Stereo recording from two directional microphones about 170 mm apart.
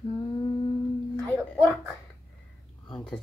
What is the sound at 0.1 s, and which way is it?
Humming, 25° left (ahead or behind).